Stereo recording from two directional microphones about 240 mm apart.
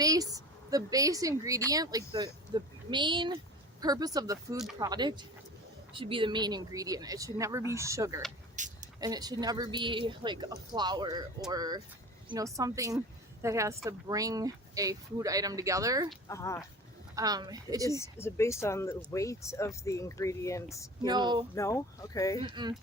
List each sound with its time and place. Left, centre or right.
0.0 s a woman's voice: centre
4.5 s speech: centre
4.8 s speech: centre
8.5 s a sound: right
9.0 s speech: centre
16.3 s speech: centre
17.2 s speech: centre
18.2 s speech: centre
21.0 s speech: centre
21.5 s speech: centre
22.4 s speech: centre